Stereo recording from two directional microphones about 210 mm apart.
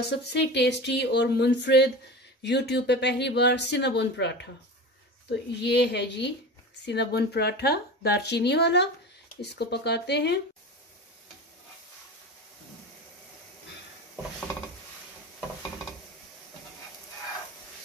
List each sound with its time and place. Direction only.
0.3 s speech: 55° left (ahead or behind)